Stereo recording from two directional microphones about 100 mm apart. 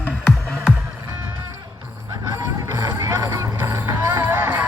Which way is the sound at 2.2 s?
35° right (ahead or behind).